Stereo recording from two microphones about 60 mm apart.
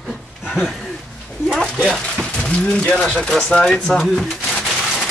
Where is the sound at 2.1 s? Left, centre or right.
Centre.